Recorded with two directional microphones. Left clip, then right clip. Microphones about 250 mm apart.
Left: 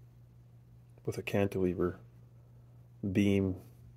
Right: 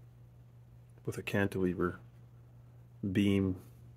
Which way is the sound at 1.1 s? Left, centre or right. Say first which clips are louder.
Left 2 dB; centre.